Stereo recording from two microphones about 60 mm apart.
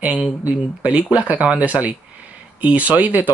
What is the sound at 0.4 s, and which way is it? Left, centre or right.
Speech, right.